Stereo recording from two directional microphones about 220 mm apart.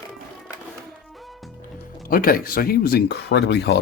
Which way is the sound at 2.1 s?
40° left (ahead or behind).